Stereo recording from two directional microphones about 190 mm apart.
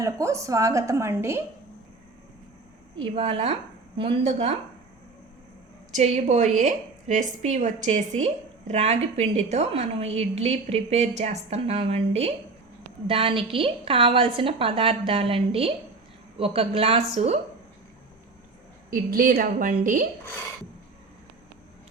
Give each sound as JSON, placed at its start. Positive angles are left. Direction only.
{"t": 0.0, "sound": "a woman's voice", "side_deg": -15}
{"t": 3.0, "sound": "a woman's voice", "side_deg": -30}
{"t": 5.9, "sound": "a woman's voice", "side_deg": -40}
{"t": 18.9, "sound": "a woman's voice", "side_deg": -50}